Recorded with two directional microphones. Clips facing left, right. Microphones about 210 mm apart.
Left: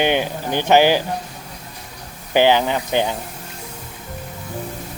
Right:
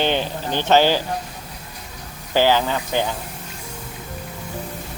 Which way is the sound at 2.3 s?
15° left (ahead or behind).